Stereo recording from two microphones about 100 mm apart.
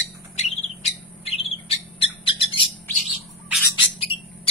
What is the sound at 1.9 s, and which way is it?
Bird, 65° left (ahead or behind).